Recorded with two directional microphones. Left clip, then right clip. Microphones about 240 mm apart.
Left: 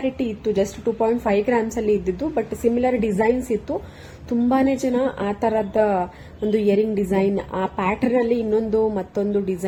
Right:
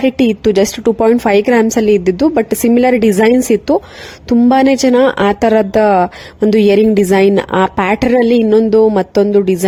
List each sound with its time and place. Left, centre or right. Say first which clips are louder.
0.0 s a woman's voice: right 12 dB; right